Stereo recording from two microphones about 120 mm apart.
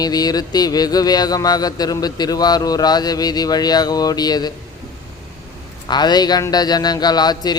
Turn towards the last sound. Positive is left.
turn(degrees=35)  # may be behind; listen again after turning